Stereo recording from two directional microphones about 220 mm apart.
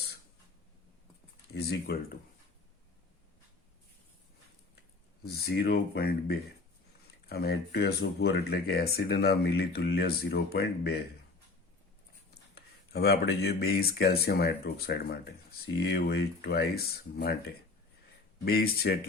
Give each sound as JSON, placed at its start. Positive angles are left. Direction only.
{"t": 1.9, "sound": "speech", "side_deg": 50}
{"t": 5.2, "sound": "speech", "side_deg": 45}
{"t": 12.5, "sound": "speech", "side_deg": 45}
{"t": 18.4, "sound": "speech", "side_deg": 45}